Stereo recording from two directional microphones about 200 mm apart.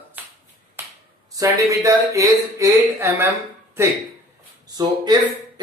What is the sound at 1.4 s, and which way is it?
Speech, 15° right (ahead or behind).